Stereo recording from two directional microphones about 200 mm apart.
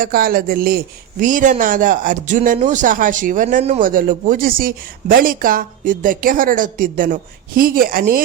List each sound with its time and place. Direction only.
0.0 s speech: 45° right (ahead or behind)